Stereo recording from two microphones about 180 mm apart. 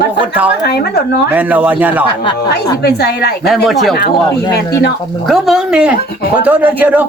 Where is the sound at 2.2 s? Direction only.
25° left (ahead or behind).